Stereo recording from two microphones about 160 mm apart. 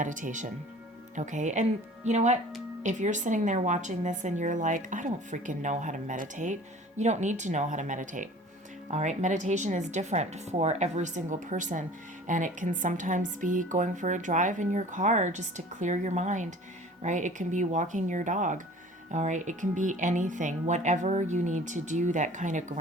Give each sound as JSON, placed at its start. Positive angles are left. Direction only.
{"t": 0.0, "sound": "speech", "side_deg": -50}